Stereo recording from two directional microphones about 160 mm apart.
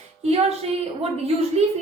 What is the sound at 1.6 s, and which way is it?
Speech, 40° right (ahead or behind).